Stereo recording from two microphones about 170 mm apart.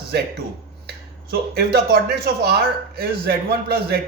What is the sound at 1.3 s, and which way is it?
A man's voice, 65° right (ahead or behind).